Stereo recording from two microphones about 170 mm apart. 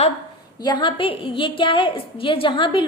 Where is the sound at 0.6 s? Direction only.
25° left (ahead or behind).